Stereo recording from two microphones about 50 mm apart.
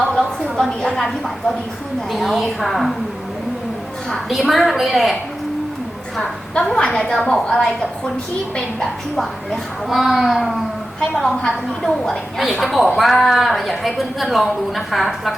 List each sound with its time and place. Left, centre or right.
0.6 s a woman's voice: centre
2.1 s a woman's voice: centre
4.3 s a woman's voice: centre
6.7 s a woman's voice: centre
9.1 s a woman's voice: centre